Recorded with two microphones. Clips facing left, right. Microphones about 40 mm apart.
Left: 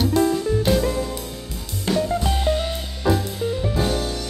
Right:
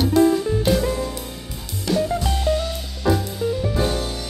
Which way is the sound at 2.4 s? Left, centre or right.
Left.